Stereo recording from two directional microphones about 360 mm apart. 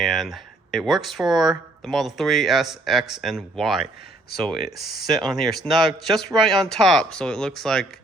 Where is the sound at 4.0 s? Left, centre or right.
Left.